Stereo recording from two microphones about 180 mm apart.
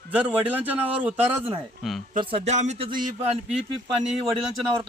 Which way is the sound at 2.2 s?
30° right (ahead or behind).